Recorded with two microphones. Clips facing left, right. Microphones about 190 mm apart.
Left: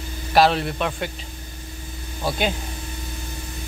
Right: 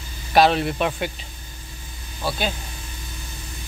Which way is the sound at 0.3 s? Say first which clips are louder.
Right 1 dB; centre (ahead or behind).